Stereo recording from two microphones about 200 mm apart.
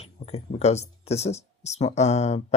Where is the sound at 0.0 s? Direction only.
30° left (ahead or behind).